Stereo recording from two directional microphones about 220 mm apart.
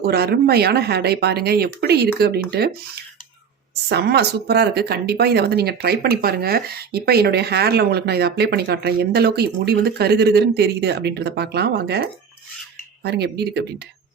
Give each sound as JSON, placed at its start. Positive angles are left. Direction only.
{"t": 0.0, "sound": "speech", "side_deg": -45}
{"t": 3.8, "sound": "speech", "side_deg": -50}